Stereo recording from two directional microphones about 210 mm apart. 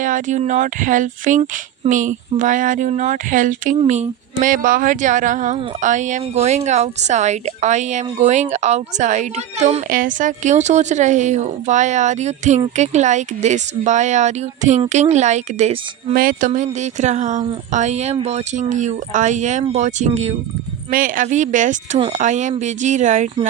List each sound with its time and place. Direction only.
0.0 s a woman's voice: 35° right (ahead or behind)
16.1 s a sound: 45° right (ahead or behind)
16.5 s a woman's voice: 35° right (ahead or behind)